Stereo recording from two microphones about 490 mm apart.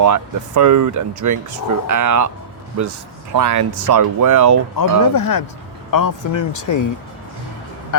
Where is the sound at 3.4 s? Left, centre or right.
Right.